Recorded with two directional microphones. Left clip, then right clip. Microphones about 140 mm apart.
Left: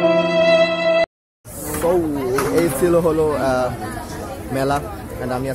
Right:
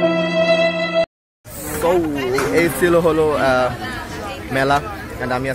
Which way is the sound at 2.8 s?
Centre (ahead or behind).